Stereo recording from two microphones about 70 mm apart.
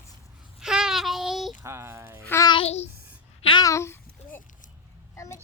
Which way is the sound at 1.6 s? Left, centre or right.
Right.